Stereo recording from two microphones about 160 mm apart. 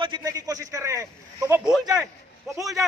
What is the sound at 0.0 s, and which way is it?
A man's voice, 25° right (ahead or behind).